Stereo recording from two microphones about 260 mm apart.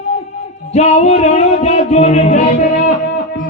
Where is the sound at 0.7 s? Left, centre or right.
Left.